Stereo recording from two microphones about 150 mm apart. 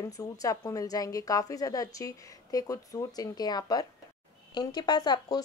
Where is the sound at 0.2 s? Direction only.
25° left (ahead or behind).